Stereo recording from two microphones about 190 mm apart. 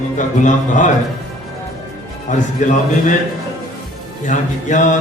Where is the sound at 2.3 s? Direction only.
40° left (ahead or behind).